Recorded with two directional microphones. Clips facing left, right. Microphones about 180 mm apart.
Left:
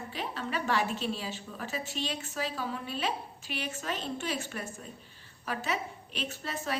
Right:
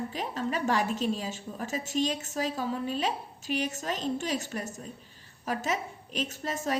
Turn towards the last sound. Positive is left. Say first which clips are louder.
# right 4 dB
turn(degrees=-45)  # may be behind; listen again after turning